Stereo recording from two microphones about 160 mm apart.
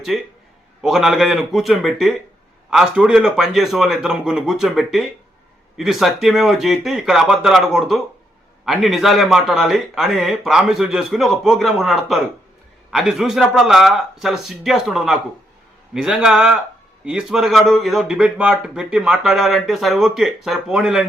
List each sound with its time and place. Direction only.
0.1 s speech: centre (ahead or behind)